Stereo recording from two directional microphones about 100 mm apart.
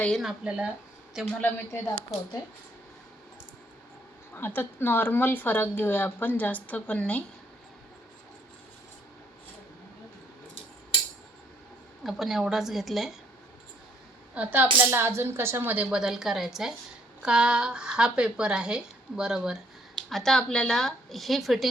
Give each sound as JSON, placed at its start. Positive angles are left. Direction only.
{"t": 0.2, "sound": "a woman's voice", "side_deg": -5}
{"t": 1.4, "sound": "speech", "side_deg": 20}
{"t": 4.4, "sound": "speech", "side_deg": 20}
{"t": 12.0, "sound": "speech", "side_deg": -5}
{"t": 14.3, "sound": "a woman's voice", "side_deg": -15}
{"t": 20.1, "sound": "speech", "side_deg": 5}